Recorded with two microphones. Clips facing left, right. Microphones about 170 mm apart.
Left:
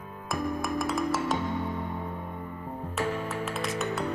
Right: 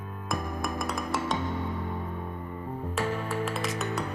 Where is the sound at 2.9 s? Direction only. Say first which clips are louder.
Even; centre (ahead or behind).